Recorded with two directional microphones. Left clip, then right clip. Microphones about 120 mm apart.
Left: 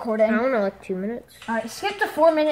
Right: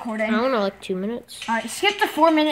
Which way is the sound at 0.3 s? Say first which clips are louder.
Even; 35° right (ahead or behind).